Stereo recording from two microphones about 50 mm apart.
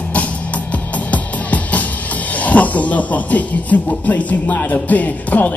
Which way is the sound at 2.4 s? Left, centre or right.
Left.